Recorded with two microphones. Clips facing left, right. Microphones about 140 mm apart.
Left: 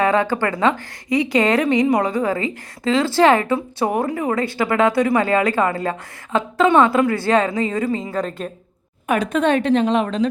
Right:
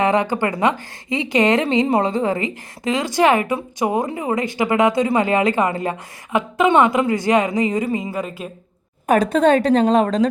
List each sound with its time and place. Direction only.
0.0 s a woman's voice: 20° right (ahead or behind)
9.0 s a woman's voice: 35° right (ahead or behind)